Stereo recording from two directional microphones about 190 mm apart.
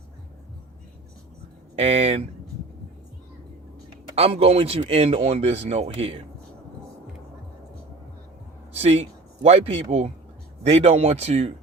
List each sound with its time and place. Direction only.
1.7 s speech: 35° right (ahead or behind)
4.1 s speech: 30° right (ahead or behind)
8.7 s speech: 35° right (ahead or behind)